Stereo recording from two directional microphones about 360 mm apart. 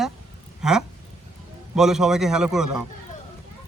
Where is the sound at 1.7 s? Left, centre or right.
Centre.